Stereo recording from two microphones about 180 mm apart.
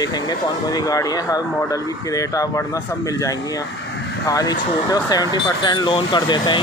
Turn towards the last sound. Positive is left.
turn(degrees=25)  # may be behind; listen again after turning